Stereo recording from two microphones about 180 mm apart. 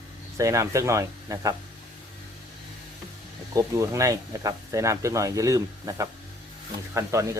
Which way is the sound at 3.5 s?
15° right (ahead or behind).